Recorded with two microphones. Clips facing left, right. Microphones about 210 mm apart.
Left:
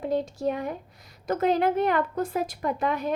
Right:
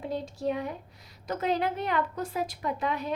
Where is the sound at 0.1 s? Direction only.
50° left (ahead or behind).